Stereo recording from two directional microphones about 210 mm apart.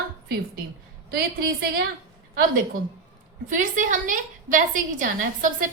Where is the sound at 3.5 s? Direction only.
40° right (ahead or behind).